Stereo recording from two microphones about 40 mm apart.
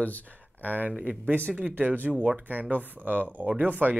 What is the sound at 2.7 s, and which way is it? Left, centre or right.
Speech, right.